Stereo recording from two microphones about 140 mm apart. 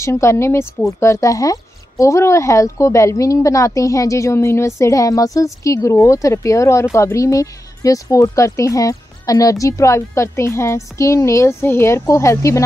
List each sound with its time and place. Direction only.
0.0 s speech: 20° left (ahead or behind)